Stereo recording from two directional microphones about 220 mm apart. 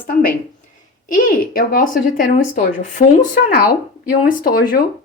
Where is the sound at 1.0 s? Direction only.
40° left (ahead or behind).